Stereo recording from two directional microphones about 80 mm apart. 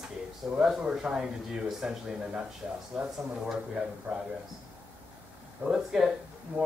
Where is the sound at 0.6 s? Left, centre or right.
Centre.